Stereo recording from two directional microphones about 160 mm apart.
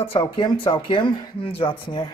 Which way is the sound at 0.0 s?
30° left (ahead or behind).